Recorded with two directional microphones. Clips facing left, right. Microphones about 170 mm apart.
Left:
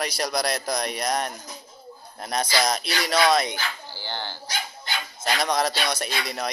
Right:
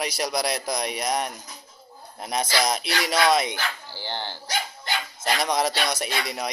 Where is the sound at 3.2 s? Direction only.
20° right (ahead or behind).